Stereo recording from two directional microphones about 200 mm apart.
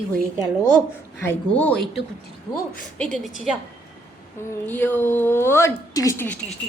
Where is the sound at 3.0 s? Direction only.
Centre (ahead or behind).